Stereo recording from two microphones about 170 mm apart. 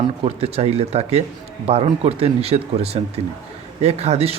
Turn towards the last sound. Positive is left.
turn(degrees=-40)  # may be behind; listen again after turning